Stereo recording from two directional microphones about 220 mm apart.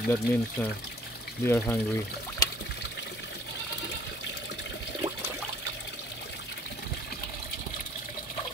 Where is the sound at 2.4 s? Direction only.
15° left (ahead or behind).